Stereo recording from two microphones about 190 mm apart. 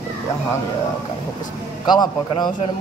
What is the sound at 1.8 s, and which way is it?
Speech, 20° left (ahead or behind).